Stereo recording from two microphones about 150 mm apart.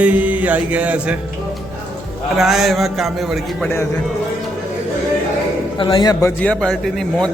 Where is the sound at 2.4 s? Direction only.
Centre (ahead or behind).